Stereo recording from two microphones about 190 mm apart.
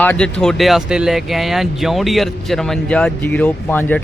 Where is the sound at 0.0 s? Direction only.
5° left (ahead or behind).